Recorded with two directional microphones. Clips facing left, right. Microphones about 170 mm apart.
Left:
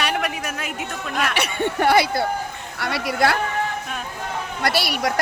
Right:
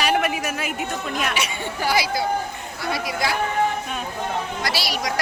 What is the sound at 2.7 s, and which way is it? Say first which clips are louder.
Speech: left 3 dB; 70° left (ahead or behind).